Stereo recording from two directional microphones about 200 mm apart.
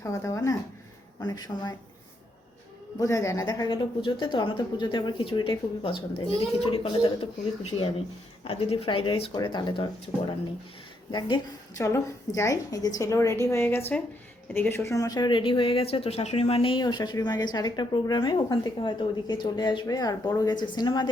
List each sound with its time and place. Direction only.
0.0 s a woman's voice: 15° left (ahead or behind)
3.0 s speech: 15° left (ahead or behind)
11.8 s a woman's voice: 15° left (ahead or behind)